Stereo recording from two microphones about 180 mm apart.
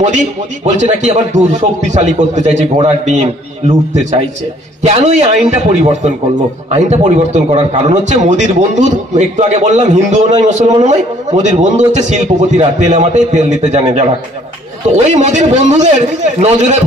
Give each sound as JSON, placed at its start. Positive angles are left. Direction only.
{"t": 0.7, "sound": "a man's voice", "side_deg": -40}